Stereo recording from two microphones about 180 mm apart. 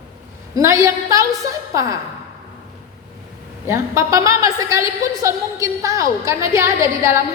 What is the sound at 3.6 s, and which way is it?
A woman's voice, 15° right (ahead or behind).